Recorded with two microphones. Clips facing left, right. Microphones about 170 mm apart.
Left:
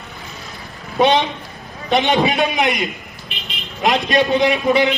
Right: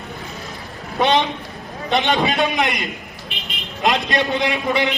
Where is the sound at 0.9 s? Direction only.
20° left (ahead or behind).